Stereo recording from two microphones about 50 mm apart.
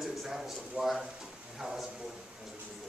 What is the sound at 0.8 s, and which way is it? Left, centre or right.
A man's voice, centre.